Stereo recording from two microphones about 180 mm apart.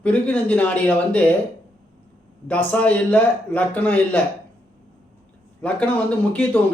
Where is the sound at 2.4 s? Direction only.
10° left (ahead or behind).